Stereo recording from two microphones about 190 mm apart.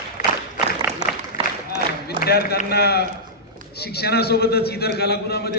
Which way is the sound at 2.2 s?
55° left (ahead or behind).